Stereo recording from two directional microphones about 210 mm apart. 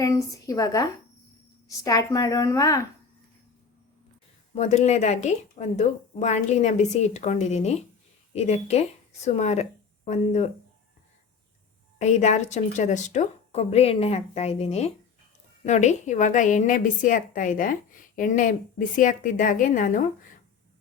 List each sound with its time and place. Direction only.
0.0 s a woman's voice: 15° left (ahead or behind)
4.5 s a woman's voice: 30° left (ahead or behind)
11.9 s a woman's voice: 35° left (ahead or behind)